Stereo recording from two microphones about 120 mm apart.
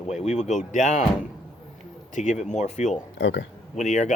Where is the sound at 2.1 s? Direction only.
85° left.